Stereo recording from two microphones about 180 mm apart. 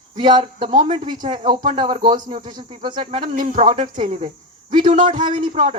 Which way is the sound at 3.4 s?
45° right (ahead or behind).